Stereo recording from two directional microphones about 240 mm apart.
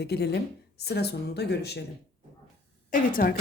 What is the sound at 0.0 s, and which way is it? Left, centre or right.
A woman's voice, left.